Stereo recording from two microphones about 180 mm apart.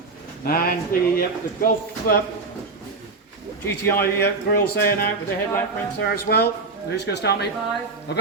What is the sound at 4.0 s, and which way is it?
Speech, 60° left (ahead or behind).